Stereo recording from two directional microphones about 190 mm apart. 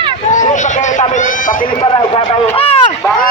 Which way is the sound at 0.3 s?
40° left (ahead or behind).